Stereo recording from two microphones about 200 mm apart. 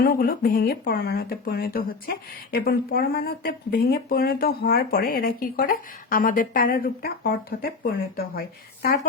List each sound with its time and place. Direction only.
0.0 s speech: 50° left (ahead or behind)